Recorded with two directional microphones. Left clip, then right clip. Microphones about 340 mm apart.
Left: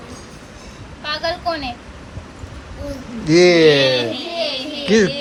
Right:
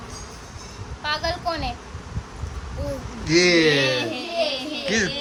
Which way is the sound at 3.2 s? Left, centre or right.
Centre.